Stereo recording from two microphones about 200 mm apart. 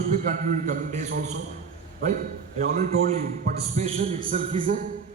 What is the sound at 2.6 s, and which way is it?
Speech, 45° right (ahead or behind).